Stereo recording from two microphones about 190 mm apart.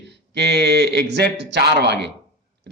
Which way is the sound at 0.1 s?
60° right (ahead or behind).